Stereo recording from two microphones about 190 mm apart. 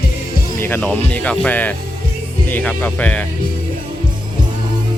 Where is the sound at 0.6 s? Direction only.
10° left (ahead or behind).